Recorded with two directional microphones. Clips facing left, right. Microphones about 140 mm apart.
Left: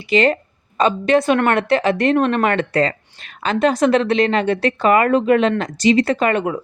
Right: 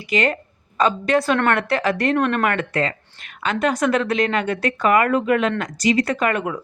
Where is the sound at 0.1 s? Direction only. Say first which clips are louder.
Left 5 dB; 25° left (ahead or behind).